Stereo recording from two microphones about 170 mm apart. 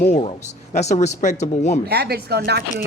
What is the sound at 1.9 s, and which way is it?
Speech, 70° right (ahead or behind).